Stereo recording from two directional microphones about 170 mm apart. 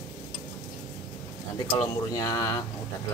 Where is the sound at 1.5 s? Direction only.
20° left (ahead or behind).